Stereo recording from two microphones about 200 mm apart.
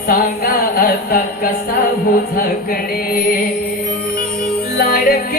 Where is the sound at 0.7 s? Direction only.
50° left (ahead or behind).